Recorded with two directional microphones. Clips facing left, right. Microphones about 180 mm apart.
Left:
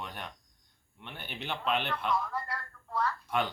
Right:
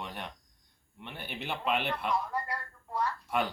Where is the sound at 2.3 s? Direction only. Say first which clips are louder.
Right 2 dB; 15° right (ahead or behind).